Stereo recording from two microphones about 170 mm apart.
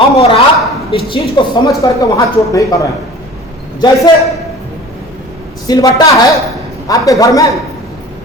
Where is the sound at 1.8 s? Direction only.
20° left (ahead or behind).